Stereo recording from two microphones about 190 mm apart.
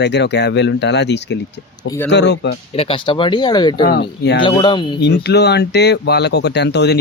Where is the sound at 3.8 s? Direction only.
55° left (ahead or behind).